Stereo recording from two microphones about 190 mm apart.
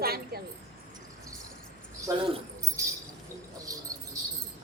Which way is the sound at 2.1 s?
15° right (ahead or behind).